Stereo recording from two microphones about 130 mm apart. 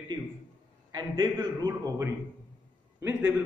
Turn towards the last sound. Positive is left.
turn(degrees=-15)  # may be behind; listen again after turning